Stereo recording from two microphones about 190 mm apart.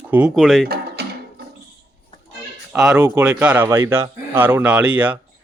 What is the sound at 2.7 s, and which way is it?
A man's voice, 5° right (ahead or behind).